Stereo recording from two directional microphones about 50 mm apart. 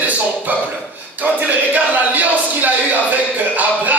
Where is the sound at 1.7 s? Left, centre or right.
Right.